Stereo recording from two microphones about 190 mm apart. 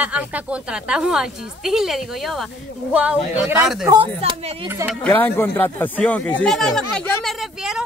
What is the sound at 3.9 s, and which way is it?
Speech, 25° right (ahead or behind).